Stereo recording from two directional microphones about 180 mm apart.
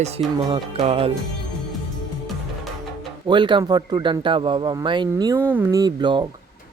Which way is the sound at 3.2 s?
25° right (ahead or behind).